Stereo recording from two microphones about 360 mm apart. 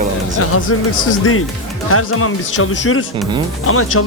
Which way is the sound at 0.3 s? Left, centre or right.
Left.